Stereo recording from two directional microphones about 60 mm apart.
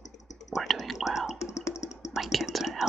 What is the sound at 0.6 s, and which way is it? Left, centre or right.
Whispering, centre.